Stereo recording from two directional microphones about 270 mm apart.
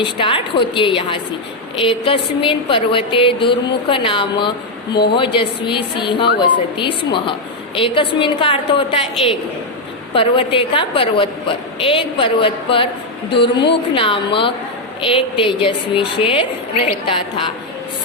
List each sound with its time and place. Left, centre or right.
0.0 s a woman's voice: centre
13.9 s a woman's voice: centre